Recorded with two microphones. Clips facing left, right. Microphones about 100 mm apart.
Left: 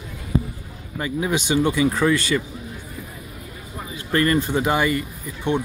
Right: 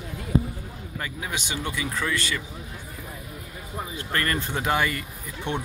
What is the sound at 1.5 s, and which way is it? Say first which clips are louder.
Speech: left 14 dB; 25° left (ahead or behind).